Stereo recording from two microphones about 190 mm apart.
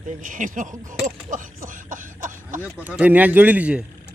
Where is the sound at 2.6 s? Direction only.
10° right (ahead or behind).